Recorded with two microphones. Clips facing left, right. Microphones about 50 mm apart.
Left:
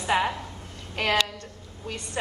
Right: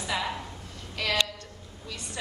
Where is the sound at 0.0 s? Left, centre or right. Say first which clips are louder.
Left 6 dB; left.